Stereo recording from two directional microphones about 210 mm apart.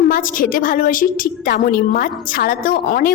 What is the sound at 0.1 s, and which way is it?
A woman's voice, 40° left (ahead or behind).